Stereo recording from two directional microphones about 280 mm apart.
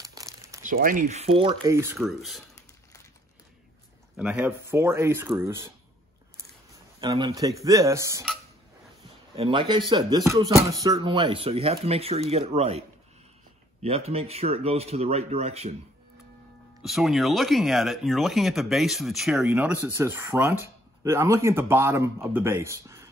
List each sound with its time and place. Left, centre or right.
0.0 s crumpling: centre
0.7 s speech: right; by 2.4 s centre
4.2 s speech: centre
7.0 s speech: centre
9.3 s speech: centre
13.8 s speech: right
16.8 s speech: centre